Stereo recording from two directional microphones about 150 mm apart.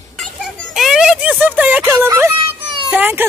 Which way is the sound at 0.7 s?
Centre (ahead or behind).